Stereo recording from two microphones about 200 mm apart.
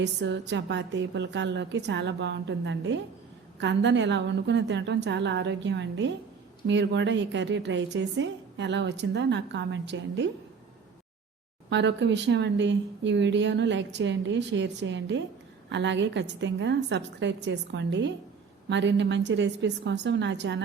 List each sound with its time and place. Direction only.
0.0 s a woman's voice: 60° right (ahead or behind)
11.7 s a woman's voice: 60° right (ahead or behind)